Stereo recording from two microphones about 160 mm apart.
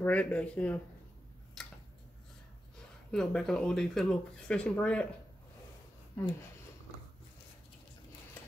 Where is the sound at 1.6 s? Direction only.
5° left (ahead or behind).